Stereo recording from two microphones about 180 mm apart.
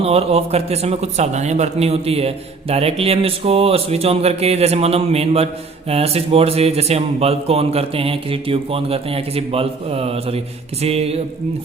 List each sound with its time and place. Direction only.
0.0 s speech: 35° right (ahead or behind)